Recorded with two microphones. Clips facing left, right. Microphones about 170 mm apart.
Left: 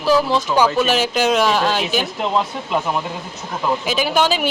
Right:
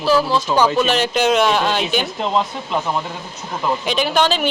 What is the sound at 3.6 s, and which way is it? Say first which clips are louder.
Speech: even; 5° left (ahead or behind).